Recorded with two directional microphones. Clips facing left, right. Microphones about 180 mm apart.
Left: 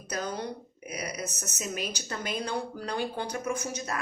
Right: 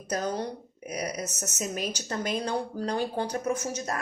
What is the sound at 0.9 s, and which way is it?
A woman's voice, 45° right (ahead or behind).